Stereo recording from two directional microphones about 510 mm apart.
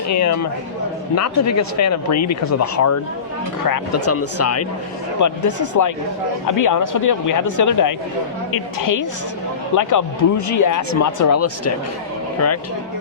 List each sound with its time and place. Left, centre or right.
0.1 s speech: left